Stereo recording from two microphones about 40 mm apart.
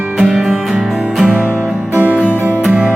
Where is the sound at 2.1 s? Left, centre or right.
Right.